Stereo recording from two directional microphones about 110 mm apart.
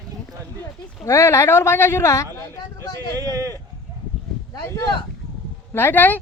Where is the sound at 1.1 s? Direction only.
25° left (ahead or behind).